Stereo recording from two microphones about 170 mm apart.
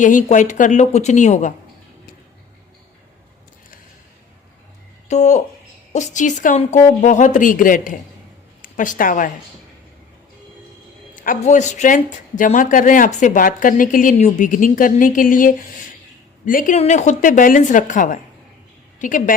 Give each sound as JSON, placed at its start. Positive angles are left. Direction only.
{"t": 0.0, "sound": "a woman's voice", "side_deg": 50}
{"t": 5.0, "sound": "a woman's voice", "side_deg": 45}
{"t": 11.1, "sound": "a woman's voice", "side_deg": 50}
{"t": 16.7, "sound": "a woman's voice", "side_deg": 40}